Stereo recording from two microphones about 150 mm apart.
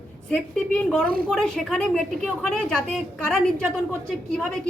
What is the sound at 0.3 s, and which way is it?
A woman's voice, 5° left (ahead or behind).